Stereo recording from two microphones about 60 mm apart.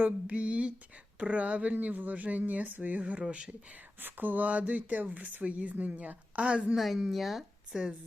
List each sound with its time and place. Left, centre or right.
0.0 s speech: right
4.0 s speech: right
6.7 s a woman's voice: centre